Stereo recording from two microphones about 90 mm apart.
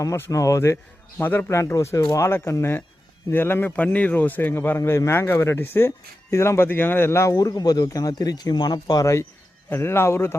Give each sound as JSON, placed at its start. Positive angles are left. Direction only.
{"t": 0.0, "sound": "speech", "side_deg": 35}
{"t": 1.2, "sound": "a man's voice", "side_deg": 20}
{"t": 1.5, "sound": "a man's voice", "side_deg": 30}
{"t": 4.8, "sound": "a man's voice", "side_deg": 35}
{"t": 7.3, "sound": "speech", "side_deg": 45}
{"t": 9.6, "sound": "a man's voice", "side_deg": 25}